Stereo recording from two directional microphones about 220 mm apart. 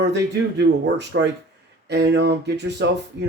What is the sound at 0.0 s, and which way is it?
Speech, 50° right (ahead or behind).